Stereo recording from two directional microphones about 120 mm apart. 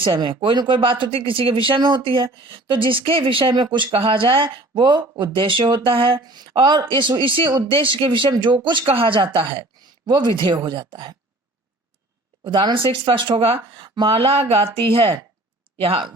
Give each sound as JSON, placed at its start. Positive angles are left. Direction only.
{"t": 0.0, "sound": "speech", "side_deg": -45}
{"t": 6.2, "sound": "speech", "side_deg": -35}
{"t": 12.5, "sound": "speech", "side_deg": -40}